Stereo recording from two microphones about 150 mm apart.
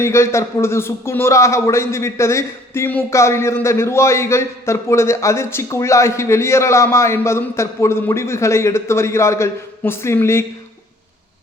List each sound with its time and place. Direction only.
0.0 s a man's voice: 20° left (ahead or behind)